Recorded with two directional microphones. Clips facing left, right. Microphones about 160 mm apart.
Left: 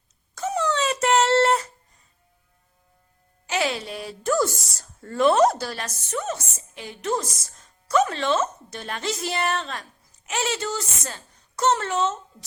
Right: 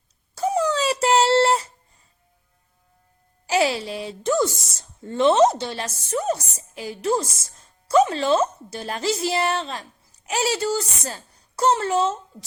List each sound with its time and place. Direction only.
0.3 s wail: 35° right (ahead or behind)
3.4 s speech: 35° right (ahead or behind)